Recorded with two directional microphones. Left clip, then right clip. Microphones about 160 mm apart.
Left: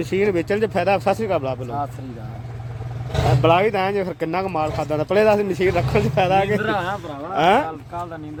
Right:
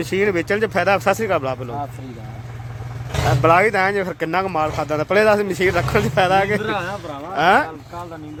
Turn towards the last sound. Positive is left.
turn(degrees=20)  # may be behind; listen again after turning